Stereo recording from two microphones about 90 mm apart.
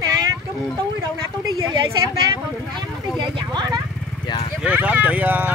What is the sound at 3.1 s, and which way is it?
Vehicle, 55° right (ahead or behind).